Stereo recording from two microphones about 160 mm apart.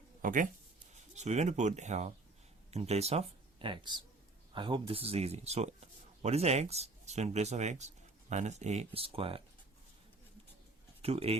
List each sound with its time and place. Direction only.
0.2 s a sound: 55° right (ahead or behind)
0.9 s speech: 45° right (ahead or behind)
11.0 s speech: 40° right (ahead or behind)